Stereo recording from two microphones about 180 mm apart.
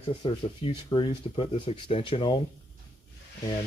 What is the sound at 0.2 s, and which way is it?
Speech, 25° left (ahead or behind).